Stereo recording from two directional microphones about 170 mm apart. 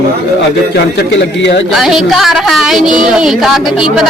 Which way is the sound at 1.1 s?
90° left.